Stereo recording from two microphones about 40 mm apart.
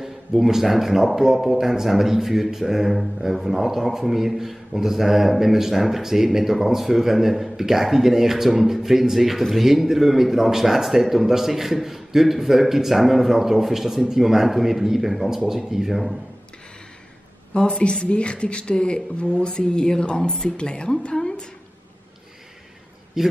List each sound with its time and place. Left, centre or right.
0.0 s speech: centre
17.6 s speech: left
23.2 s speech: centre